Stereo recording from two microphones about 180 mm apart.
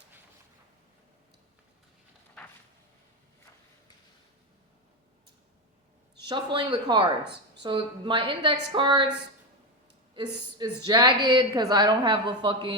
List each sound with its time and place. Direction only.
6.2 s a woman's voice: 25° right (ahead or behind)
10.2 s a woman's voice: 25° right (ahead or behind)